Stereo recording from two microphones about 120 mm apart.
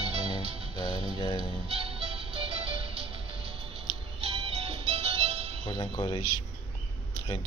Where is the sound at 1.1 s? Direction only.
35° left (ahead or behind).